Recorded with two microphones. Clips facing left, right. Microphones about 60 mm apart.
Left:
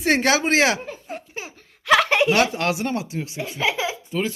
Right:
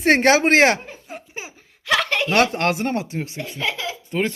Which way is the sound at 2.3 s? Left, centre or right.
Right.